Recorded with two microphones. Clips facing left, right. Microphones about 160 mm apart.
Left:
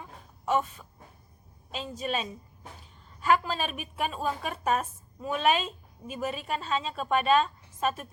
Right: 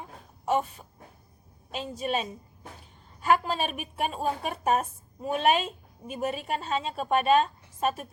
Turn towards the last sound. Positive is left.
turn(degrees=-45)  # may be behind; listen again after turning